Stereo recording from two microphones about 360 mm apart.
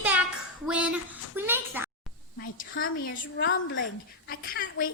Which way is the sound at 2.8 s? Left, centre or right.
Left.